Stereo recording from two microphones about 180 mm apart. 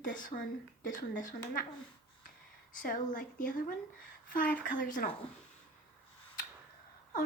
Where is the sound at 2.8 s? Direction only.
50° left (ahead or behind).